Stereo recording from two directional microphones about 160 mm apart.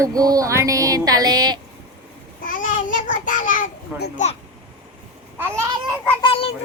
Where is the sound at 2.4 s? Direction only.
55° left (ahead or behind).